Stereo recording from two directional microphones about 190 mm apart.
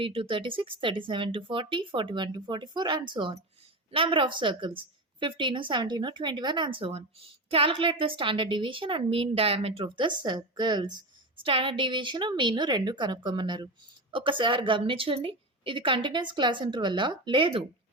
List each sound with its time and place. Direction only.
0.0 s a woman's voice: 30° right (ahead or behind)